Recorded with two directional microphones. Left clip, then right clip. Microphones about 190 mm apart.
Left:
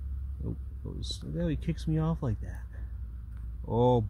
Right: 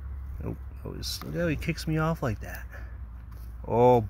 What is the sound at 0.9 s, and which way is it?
Speech, 10° left (ahead or behind).